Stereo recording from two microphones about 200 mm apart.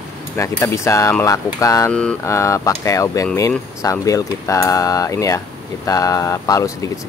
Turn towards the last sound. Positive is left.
turn(degrees=15)  # may be behind; listen again after turning